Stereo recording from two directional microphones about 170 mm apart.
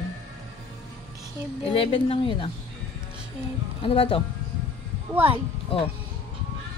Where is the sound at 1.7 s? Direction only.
30° left (ahead or behind).